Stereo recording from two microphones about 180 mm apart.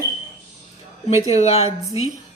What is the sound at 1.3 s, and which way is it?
Speech, 35° left (ahead or behind).